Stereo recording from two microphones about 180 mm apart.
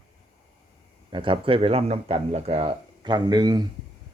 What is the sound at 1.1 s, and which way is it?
A man's voice, 30° right (ahead or behind).